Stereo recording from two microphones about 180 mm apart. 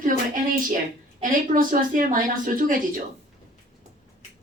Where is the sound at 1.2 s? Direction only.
50° right (ahead or behind).